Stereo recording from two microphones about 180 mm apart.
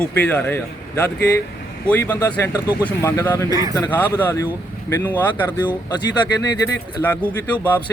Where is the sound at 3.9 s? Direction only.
10° left (ahead or behind).